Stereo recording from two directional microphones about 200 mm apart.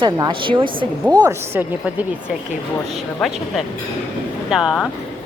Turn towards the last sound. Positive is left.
turn(degrees=0)  # may be behind; listen again after turning